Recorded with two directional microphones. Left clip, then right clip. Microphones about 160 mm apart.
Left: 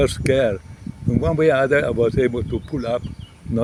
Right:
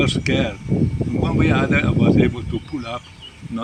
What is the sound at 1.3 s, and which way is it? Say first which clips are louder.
Speech: left 5 dB; 30° left (ahead or behind).